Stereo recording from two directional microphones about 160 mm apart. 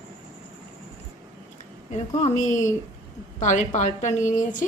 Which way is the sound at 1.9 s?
45° left (ahead or behind).